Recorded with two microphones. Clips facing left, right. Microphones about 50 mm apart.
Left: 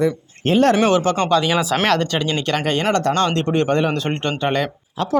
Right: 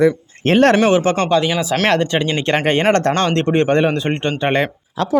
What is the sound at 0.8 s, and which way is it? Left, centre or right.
Speech, right.